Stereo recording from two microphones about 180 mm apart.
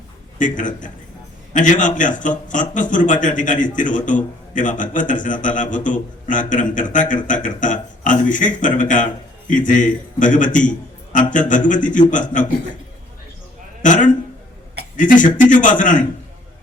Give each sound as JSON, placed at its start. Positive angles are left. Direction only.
{"t": 0.3, "sound": "a man's voice", "side_deg": 45}
{"t": 13.8, "sound": "a man's voice", "side_deg": 45}